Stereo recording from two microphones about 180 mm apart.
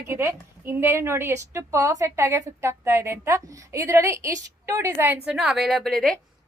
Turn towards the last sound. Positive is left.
turn(degrees=0)  # may be behind; listen again after turning